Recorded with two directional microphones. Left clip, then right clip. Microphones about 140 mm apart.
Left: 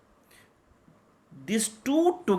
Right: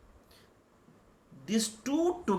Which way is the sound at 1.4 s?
50° left (ahead or behind).